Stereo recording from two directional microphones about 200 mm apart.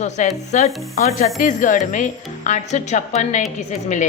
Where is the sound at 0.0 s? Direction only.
35° left (ahead or behind).